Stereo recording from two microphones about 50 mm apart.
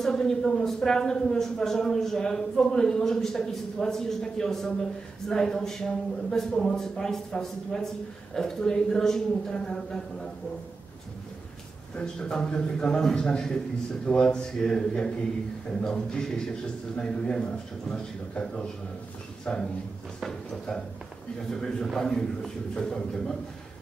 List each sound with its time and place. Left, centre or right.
0.0 s a woman's voice: centre
11.9 s a woman's voice: centre